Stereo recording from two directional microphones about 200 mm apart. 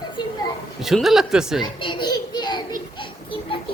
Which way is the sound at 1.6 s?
25° left (ahead or behind).